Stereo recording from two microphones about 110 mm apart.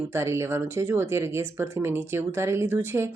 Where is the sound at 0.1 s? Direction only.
25° right (ahead or behind).